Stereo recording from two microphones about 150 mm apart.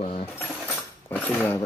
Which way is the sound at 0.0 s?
45° left (ahead or behind).